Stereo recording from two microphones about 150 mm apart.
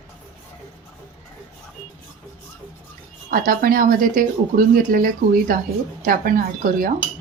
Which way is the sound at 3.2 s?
70° right (ahead or behind).